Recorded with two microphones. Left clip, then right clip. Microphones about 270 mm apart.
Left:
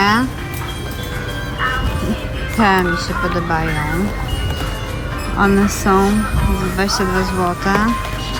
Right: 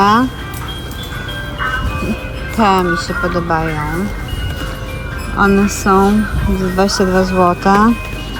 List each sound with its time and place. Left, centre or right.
0.0 s music: centre
2.6 s speech: centre
5.4 s speech: centre